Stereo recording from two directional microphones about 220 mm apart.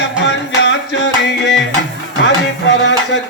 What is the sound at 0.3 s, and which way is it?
Music, 55° left (ahead or behind).